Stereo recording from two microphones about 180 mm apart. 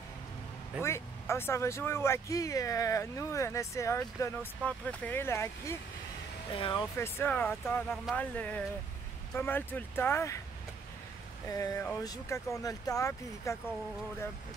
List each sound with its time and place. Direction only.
0.8 s speech: 15° left (ahead or behind)
6.5 s speech: 25° left (ahead or behind)
7.0 s speech: 10° left (ahead or behind)
11.4 s speech: 20° left (ahead or behind)